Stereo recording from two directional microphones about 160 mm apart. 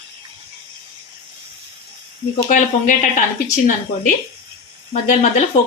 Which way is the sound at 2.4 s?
50° left (ahead or behind).